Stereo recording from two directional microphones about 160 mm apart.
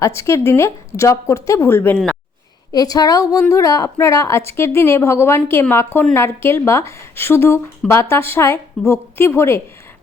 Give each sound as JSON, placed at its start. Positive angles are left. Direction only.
{"t": 0.0, "sound": "a woman's voice", "side_deg": 15}